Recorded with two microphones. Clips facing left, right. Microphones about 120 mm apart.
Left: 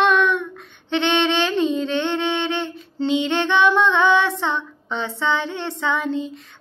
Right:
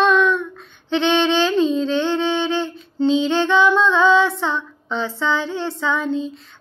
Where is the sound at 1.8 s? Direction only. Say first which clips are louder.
Right 3 dB; 60° left (ahead or behind).